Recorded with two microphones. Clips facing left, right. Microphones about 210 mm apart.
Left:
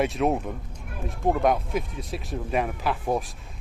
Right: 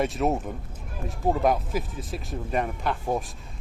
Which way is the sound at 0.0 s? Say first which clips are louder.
Left 1 dB; centre (ahead or behind).